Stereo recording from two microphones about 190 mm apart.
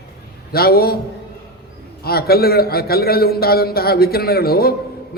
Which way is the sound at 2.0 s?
55° left (ahead or behind).